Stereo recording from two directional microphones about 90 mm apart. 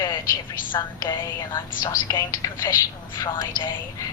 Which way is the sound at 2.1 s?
40° left (ahead or behind).